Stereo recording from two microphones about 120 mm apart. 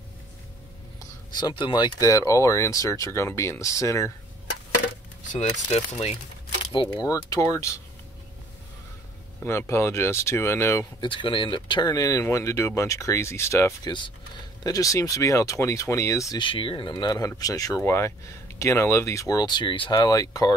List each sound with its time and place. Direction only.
1.4 s speech: 40° left (ahead or behind); by 4.1 s 25° left (ahead or behind)
5.3 s speech: 70° left (ahead or behind)
6.9 s speech: 30° left (ahead or behind)
9.4 s speech: 20° left (ahead or behind)
11.0 s speech: 45° left (ahead or behind); by 13.7 s 25° left (ahead or behind)
13.8 s speech: 40° left (ahead or behind)
14.6 s speech: 30° left (ahead or behind)
16.3 s speech: 45° left (ahead or behind)